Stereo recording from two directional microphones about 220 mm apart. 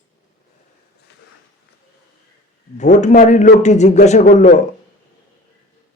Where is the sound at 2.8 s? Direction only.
30° left (ahead or behind).